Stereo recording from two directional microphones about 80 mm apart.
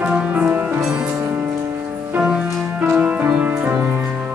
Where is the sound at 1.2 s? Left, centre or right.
Right.